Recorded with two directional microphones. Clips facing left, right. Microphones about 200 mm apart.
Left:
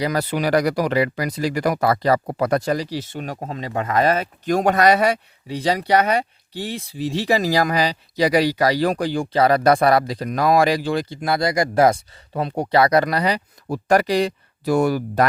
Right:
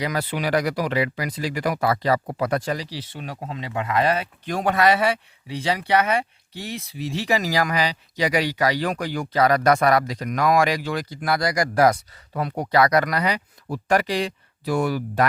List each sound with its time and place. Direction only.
0.0 s speech: 40° left (ahead or behind)